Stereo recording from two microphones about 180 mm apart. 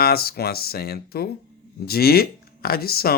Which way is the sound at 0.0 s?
60° left (ahead or behind).